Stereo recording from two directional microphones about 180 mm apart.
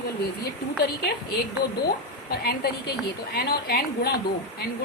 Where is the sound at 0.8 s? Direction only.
60° left (ahead or behind).